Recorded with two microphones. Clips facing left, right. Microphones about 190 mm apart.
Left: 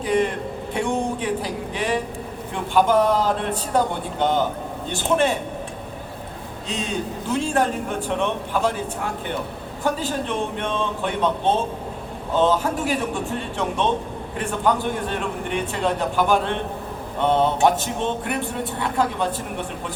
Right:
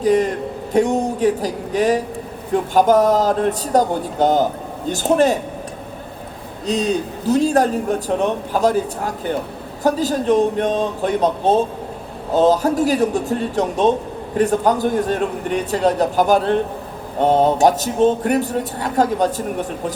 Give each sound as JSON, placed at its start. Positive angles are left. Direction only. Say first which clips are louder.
{"t": 0.0, "sound": "a man's voice", "louder": "right 5 dB", "side_deg": -40}
{"t": 6.7, "sound": "a man's voice", "louder": "right 8 dB", "side_deg": -40}